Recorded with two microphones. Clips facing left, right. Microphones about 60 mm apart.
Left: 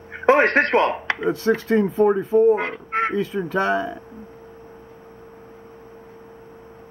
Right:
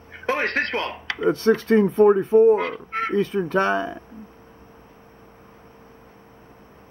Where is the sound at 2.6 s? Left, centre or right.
Left.